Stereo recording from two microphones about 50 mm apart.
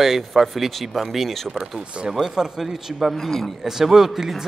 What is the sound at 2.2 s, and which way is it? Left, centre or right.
A man's voice, centre.